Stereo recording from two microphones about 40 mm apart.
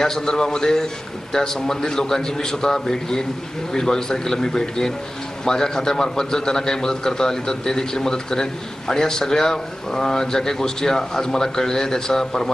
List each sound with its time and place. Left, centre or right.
0.0 s a man's voice: centre